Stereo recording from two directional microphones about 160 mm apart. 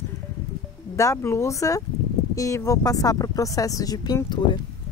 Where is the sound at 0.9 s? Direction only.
20° left (ahead or behind).